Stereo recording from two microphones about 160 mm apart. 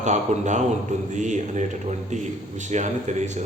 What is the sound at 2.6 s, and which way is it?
Speech, 50° right (ahead or behind).